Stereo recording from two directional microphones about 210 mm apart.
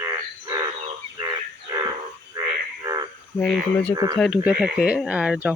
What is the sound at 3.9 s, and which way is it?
Speech, 20° right (ahead or behind).